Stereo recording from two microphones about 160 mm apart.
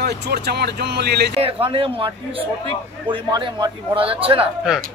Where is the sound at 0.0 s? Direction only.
90° right.